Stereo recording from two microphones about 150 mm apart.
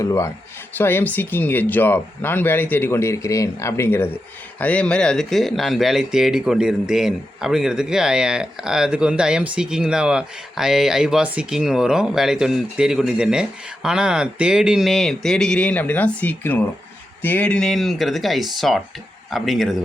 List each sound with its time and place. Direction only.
0.0 s speech: 20° left (ahead or behind); by 19.8 s centre (ahead or behind)